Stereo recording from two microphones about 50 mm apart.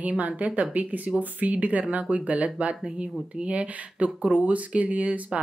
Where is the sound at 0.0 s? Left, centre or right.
Right.